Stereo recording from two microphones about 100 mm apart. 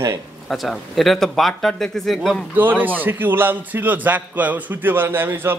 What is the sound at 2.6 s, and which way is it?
A man's voice, 20° right (ahead or behind).